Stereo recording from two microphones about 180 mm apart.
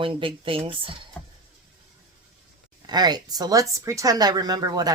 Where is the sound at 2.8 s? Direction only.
25° right (ahead or behind).